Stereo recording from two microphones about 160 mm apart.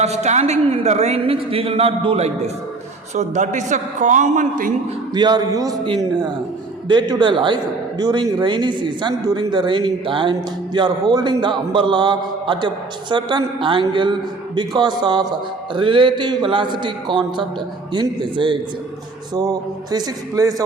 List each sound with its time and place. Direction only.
0.0 s a woman's voice: 45° right (ahead or behind)
5.1 s a man's voice: 25° right (ahead or behind)